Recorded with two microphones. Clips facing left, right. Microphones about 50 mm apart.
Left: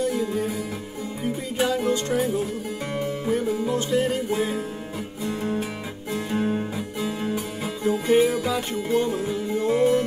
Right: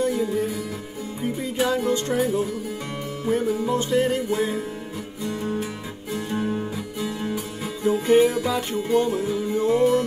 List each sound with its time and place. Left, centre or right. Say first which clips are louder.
0.0 s music: right 2 dB; centre
5.2 s music: even; centre
6.1 s guitar: left 1 dB; centre
6.6 s music: left 1 dB; centre
7.9 s music: right 2 dB; centre
8.3 s music: right 1 dB; centre